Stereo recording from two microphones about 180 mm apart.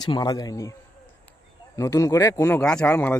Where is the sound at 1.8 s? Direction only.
15° left (ahead or behind).